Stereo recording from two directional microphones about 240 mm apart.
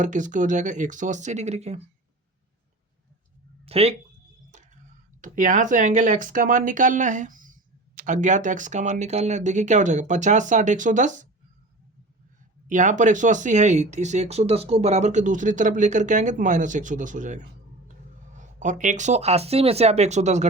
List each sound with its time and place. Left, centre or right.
0.0 s speech: right
3.7 s speech: right
5.2 s speech: right
12.6 s speech: right